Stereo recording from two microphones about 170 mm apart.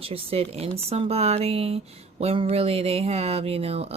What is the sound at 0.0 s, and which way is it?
Speech, 35° right (ahead or behind).